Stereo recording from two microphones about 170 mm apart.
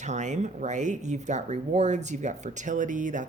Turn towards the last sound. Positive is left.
turn(degrees=-50)  # may be behind; listen again after turning